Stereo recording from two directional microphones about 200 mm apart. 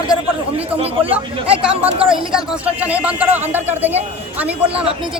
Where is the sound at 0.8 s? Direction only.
30° right (ahead or behind).